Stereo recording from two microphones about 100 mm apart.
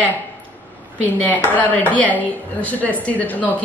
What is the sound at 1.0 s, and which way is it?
A woman's voice, 15° left (ahead or behind).